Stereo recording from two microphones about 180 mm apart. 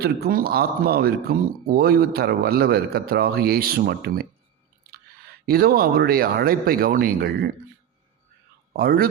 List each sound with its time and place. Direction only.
0.0 s speech: 55° right (ahead or behind)
5.5 s speech: 55° right (ahead or behind)
8.7 s speech: 55° right (ahead or behind)